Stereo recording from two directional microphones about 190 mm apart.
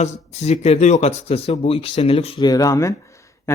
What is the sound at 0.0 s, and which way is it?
A man's voice, 35° left (ahead or behind).